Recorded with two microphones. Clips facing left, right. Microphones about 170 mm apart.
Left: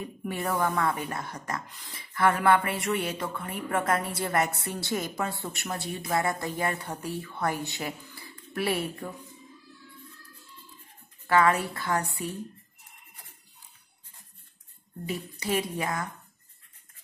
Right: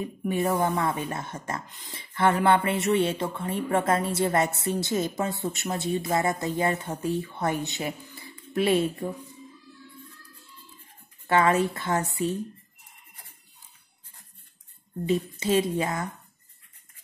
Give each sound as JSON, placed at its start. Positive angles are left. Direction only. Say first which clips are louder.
{"t": 0.2, "sound": "speech", "louder": "right 4 dB", "side_deg": -20}
{"t": 11.2, "sound": "speech", "louder": "right 2 dB", "side_deg": -25}
{"t": 15.0, "sound": "speech", "louder": "right 6 dB", "side_deg": -25}